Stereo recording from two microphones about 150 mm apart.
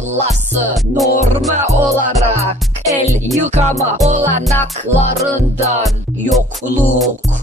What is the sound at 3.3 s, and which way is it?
Music, 50° right (ahead or behind).